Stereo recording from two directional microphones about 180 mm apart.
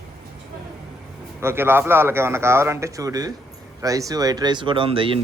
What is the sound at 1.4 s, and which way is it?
A man's voice, 15° right (ahead or behind).